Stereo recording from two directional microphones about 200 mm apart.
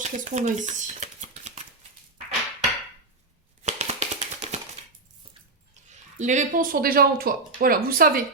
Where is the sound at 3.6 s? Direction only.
35° right (ahead or behind).